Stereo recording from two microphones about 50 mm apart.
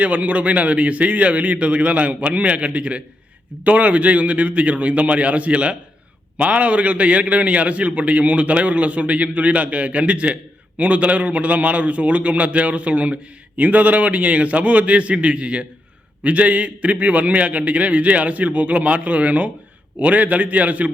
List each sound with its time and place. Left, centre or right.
0.0 s a man's voice: right